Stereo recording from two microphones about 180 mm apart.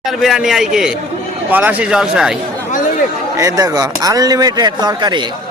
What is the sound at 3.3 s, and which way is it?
Speech, 20° right (ahead or behind).